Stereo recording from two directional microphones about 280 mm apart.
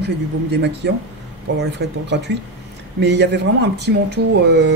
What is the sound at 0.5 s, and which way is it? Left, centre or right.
Speech, right.